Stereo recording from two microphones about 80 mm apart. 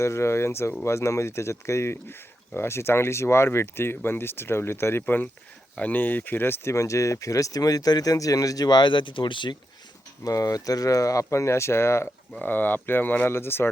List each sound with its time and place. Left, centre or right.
0.0 s speech: left
6.7 s speech: left
10.2 s speech: left
12.4 s speech: left